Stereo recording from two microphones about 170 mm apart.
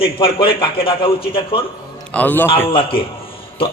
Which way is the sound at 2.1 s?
10° left (ahead or behind).